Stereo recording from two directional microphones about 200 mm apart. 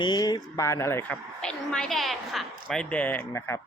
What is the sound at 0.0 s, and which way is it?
A woman's voice, 20° left (ahead or behind).